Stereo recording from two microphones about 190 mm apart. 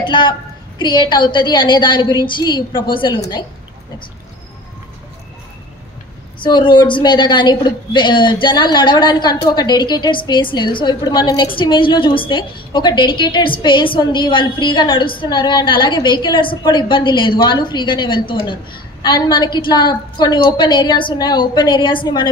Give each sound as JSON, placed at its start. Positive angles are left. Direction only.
{"t": 0.0, "sound": "a woman's voice", "side_deg": 25}
{"t": 6.4, "sound": "a woman's voice", "side_deg": 25}